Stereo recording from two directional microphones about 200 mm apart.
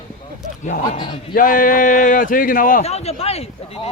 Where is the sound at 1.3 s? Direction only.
40° left (ahead or behind).